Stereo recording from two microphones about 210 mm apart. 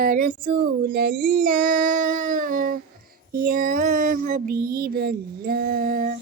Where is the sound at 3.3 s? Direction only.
40° right (ahead or behind).